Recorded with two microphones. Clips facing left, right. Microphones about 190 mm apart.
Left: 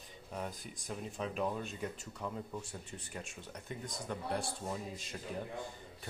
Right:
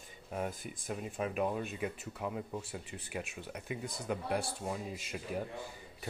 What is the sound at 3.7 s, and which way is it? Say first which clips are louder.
Speech: right 4 dB; 10° right (ahead or behind).